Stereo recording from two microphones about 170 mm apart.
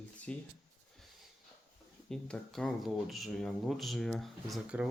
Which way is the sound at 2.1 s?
Centre (ahead or behind).